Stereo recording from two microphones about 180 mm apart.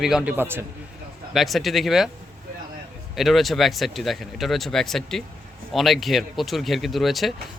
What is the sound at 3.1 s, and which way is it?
Speech, centre (ahead or behind).